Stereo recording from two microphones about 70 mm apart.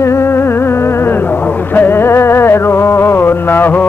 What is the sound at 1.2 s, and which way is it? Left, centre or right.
Music, left.